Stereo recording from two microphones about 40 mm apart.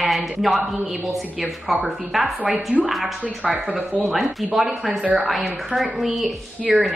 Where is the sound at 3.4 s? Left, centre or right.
Right.